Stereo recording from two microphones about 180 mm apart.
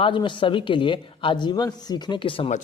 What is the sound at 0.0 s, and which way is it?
A woman's voice, 25° left (ahead or behind).